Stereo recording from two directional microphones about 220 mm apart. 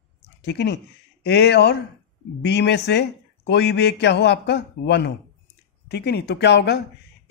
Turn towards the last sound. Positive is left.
turn(degrees=50)  # may be behind; listen again after turning